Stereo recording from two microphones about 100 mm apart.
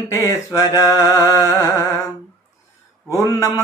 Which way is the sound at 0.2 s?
30° left (ahead or behind).